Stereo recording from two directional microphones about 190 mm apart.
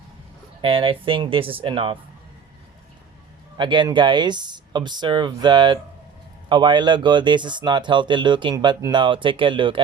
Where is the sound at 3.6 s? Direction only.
25° right (ahead or behind).